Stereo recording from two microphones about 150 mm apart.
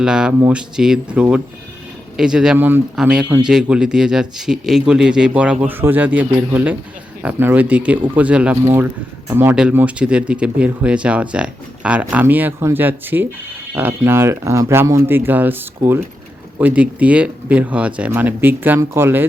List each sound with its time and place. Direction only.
0.0 s speech: 5° right (ahead or behind)